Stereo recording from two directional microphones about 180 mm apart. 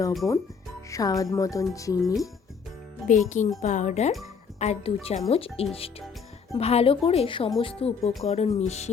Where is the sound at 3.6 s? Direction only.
40° left (ahead or behind).